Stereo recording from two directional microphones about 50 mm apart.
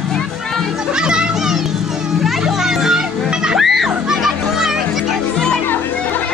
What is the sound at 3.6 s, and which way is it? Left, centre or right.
Music, centre.